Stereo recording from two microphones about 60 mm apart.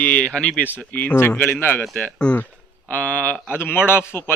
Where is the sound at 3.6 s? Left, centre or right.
Left.